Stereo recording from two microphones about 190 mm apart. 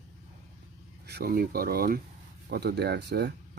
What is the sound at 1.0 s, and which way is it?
Speech, 55° right (ahead or behind).